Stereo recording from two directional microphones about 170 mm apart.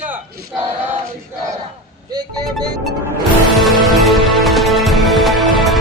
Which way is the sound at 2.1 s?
25° right (ahead or behind).